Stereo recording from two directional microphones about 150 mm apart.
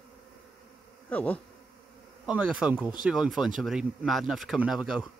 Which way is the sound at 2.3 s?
10° right (ahead or behind).